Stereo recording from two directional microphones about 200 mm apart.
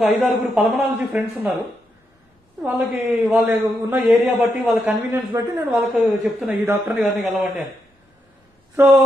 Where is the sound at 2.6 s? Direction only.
5° right (ahead or behind).